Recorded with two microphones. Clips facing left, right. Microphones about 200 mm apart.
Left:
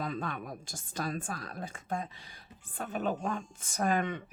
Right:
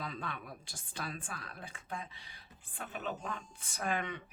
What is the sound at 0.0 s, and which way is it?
A woman's voice, 45° left (ahead or behind).